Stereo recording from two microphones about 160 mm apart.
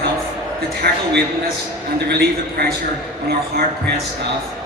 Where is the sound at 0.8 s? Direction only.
85° right.